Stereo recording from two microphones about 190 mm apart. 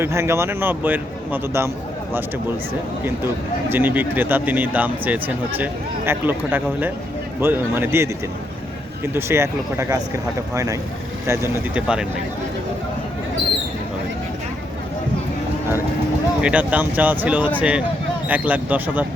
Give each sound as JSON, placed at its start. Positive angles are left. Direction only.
{"t": 0.0, "sound": "speech", "side_deg": -15}
{"t": 3.7, "sound": "speech", "side_deg": -10}
{"t": 9.1, "sound": "speech", "side_deg": -15}
{"t": 16.4, "sound": "speech", "side_deg": -5}